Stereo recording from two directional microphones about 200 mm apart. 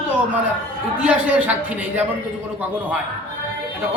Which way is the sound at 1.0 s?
5° right (ahead or behind).